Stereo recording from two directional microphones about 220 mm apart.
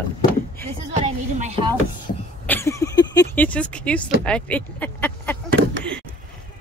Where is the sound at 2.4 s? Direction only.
10° left (ahead or behind).